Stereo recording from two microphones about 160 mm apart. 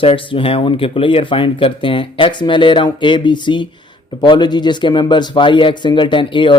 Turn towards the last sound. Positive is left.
turn(degrees=30)  # may be behind; listen again after turning